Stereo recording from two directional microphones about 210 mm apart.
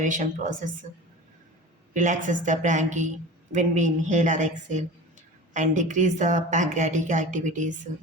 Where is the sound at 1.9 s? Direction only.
35° right (ahead or behind).